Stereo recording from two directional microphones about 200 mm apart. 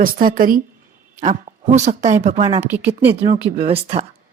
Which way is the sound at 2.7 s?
10° right (ahead or behind).